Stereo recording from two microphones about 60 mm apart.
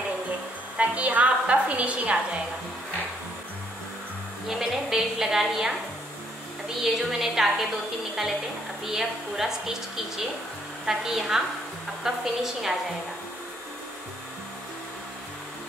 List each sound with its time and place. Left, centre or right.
0.7 s a woman's voice: right
4.5 s a woman's voice: centre
6.8 s a woman's voice: centre
8.8 s a woman's voice: centre